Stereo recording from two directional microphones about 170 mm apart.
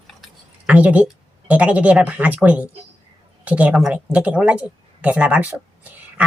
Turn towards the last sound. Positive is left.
turn(degrees=-10)  # may be behind; listen again after turning